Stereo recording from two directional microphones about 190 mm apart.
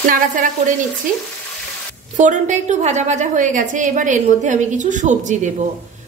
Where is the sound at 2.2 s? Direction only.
40° right (ahead or behind).